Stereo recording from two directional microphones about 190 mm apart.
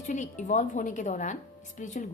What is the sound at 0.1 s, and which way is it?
A woman's voice, 40° left (ahead or behind).